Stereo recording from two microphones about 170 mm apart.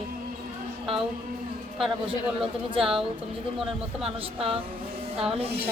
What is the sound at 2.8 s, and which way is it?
Speech, 5° right (ahead or behind).